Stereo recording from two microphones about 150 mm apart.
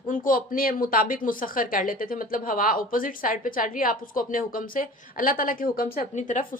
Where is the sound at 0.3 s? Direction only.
75° left (ahead or behind).